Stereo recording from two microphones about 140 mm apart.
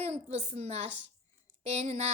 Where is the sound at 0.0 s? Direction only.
50° right (ahead or behind).